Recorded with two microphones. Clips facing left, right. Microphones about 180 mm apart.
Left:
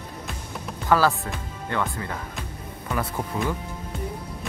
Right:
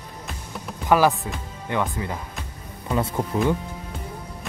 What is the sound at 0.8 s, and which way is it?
Speech, 15° right (ahead or behind).